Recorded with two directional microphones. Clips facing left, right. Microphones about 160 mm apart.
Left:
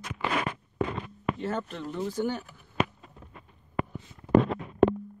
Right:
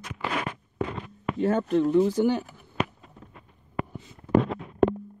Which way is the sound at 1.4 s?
50° right (ahead or behind).